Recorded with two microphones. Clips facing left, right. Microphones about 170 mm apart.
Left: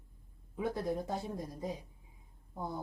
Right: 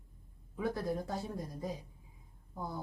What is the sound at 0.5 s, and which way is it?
A woman's voice, 20° left (ahead or behind).